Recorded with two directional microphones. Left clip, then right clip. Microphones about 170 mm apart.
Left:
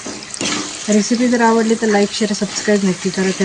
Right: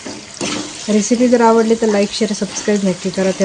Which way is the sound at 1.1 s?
20° left (ahead or behind).